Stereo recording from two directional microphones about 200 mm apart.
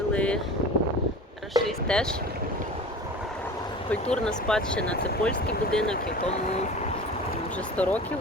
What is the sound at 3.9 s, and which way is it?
Speech, 5° left (ahead or behind).